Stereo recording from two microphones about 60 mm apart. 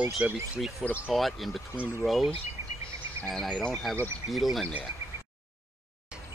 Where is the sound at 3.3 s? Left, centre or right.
Centre.